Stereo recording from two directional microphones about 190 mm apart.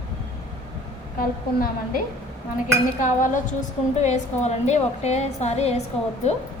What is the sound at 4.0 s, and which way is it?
A woman's voice, 35° left (ahead or behind).